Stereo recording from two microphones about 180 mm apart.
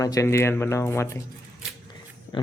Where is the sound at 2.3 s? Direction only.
25° left (ahead or behind).